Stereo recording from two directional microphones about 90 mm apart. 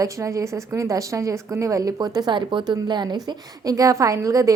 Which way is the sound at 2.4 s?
60° right (ahead or behind).